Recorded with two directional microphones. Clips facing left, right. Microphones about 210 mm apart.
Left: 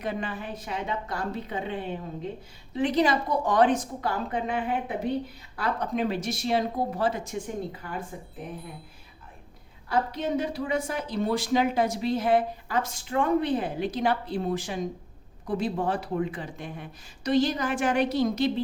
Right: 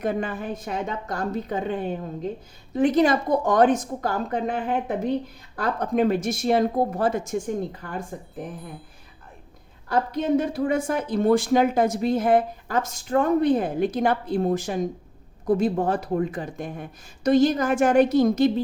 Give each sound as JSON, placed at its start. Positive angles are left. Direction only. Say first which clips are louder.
{"t": 0.0, "sound": "speech", "louder": "right 6 dB", "side_deg": -45}
{"t": 9.9, "sound": "speech", "louder": "right 5 dB", "side_deg": -50}